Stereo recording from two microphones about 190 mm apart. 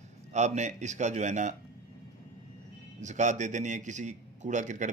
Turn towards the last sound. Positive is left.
turn(degrees=-40)  # may be behind; listen again after turning